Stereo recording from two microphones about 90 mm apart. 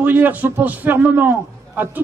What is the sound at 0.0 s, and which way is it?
A man's voice, 20° right (ahead or behind).